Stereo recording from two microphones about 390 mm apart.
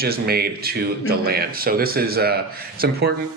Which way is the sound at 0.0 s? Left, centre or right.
Right.